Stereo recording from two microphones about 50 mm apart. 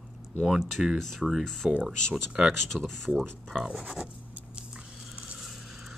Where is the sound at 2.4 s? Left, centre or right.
Centre.